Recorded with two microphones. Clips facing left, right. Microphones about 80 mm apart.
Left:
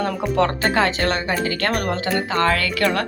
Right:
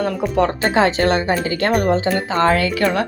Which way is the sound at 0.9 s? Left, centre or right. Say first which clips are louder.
Right 5 dB; right.